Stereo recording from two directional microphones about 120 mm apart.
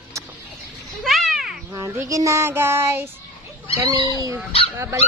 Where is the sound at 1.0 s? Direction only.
Centre (ahead or behind).